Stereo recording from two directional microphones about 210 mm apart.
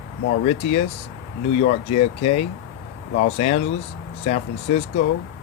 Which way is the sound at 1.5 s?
30° left (ahead or behind).